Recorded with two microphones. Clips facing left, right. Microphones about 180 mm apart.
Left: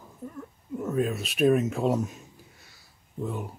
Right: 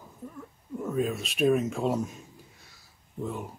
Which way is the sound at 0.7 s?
Centre (ahead or behind).